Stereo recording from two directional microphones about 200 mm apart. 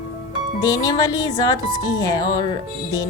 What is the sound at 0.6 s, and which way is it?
A woman's voice, 20° left (ahead or behind).